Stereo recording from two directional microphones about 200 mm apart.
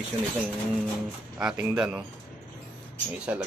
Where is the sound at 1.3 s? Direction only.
10° right (ahead or behind).